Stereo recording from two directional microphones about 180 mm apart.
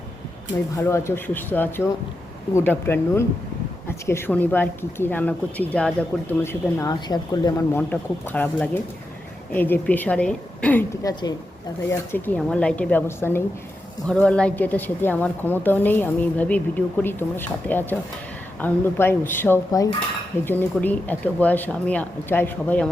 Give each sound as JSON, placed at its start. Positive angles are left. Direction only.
{"t": 0.8, "sound": "a woman's voice", "side_deg": 15}
{"t": 11.0, "sound": "a woman's voice", "side_deg": 20}
{"t": 11.9, "sound": "a woman's voice", "side_deg": 10}